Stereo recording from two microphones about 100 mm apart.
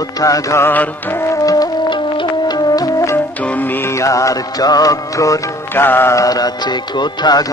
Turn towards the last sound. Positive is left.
turn(degrees=45)  # may be behind; listen again after turning